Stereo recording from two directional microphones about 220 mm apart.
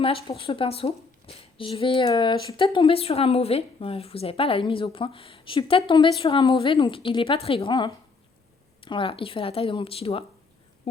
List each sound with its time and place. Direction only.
0.0 s a woman's voice: 25° left (ahead or behind)